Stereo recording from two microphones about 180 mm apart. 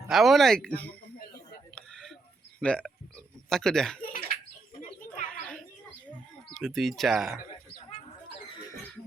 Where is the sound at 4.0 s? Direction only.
50° left (ahead or behind).